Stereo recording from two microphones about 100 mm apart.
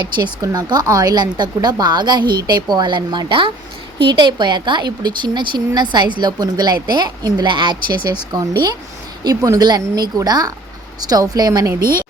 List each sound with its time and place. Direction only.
0.4 s speech: 45° right (ahead or behind)